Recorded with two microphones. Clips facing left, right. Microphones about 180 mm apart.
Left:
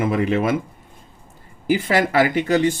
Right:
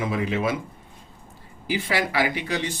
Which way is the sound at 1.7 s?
50° left (ahead or behind).